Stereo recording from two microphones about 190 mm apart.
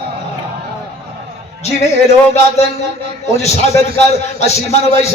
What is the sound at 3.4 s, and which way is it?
Speech, 35° left (ahead or behind).